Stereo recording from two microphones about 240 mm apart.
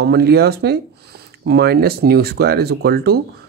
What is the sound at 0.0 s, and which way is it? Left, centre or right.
Speech, right.